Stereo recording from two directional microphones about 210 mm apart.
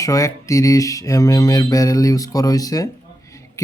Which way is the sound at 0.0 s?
15° left (ahead or behind).